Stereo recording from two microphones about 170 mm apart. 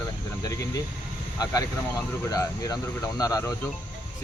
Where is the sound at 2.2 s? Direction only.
20° left (ahead or behind).